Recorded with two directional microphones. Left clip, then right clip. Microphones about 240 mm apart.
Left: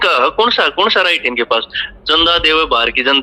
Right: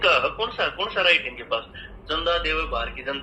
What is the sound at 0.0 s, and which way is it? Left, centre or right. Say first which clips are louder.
Speech: left 9 dB; left.